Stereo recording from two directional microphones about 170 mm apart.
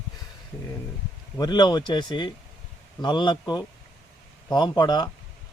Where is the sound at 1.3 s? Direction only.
25° left (ahead or behind).